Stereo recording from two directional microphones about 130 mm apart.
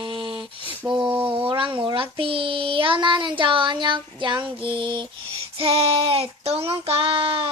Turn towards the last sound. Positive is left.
turn(degrees=-45)  # may be behind; listen again after turning